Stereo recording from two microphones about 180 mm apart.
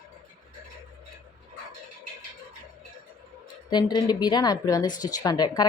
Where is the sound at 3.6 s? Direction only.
25° left (ahead or behind).